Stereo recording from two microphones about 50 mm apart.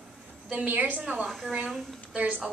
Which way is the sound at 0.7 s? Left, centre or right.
Right.